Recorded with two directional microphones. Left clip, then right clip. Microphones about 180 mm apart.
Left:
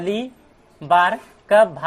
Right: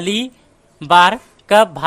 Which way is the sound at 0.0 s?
40° right (ahead or behind).